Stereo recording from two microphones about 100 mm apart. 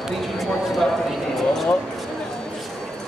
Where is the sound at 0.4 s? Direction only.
Centre (ahead or behind).